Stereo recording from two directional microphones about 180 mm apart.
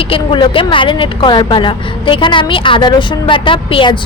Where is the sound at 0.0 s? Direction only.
30° left (ahead or behind).